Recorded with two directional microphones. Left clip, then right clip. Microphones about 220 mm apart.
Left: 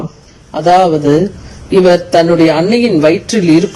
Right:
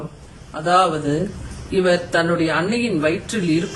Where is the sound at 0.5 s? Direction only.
25° left (ahead or behind).